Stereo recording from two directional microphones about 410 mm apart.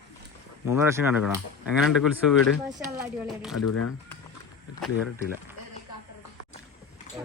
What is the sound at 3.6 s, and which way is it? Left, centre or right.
Speech, left.